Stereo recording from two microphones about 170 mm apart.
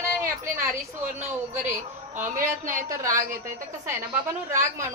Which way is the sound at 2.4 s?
50° right (ahead or behind).